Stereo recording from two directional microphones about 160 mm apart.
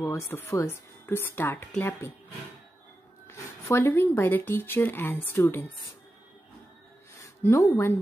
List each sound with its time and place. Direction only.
0.0 s speech: 20° left (ahead or behind)
3.3 s speech: 15° left (ahead or behind)
7.2 s speech: 20° left (ahead or behind)